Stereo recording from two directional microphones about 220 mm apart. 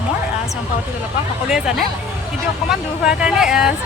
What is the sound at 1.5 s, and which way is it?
Speech, centre (ahead or behind).